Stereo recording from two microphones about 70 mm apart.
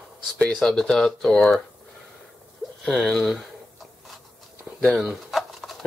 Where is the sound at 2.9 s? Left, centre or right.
Centre.